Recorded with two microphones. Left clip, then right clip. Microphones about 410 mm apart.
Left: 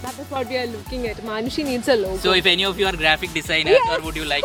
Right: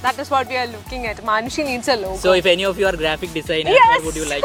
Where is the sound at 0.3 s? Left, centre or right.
Right.